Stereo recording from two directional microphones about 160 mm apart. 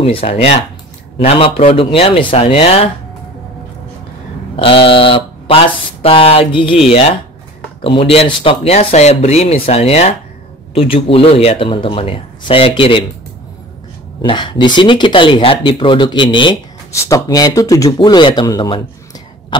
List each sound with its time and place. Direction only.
0.0 s speech: 40° left (ahead or behind)
4.6 s mantra: 35° left (ahead or behind)
6.0 s speech: 35° left (ahead or behind)
14.2 s speech: 30° left (ahead or behind)
16.9 s speech: 20° left (ahead or behind)